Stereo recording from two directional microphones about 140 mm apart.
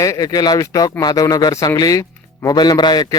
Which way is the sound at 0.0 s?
25° left (ahead or behind).